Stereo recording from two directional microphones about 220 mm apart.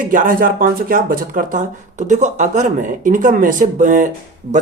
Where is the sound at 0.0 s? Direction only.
35° right (ahead or behind).